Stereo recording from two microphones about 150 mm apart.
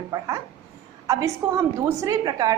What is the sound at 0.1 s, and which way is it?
A woman's voice, 20° right (ahead or behind).